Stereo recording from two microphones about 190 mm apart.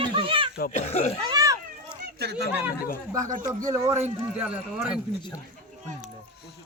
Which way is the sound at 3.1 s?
45° right (ahead or behind).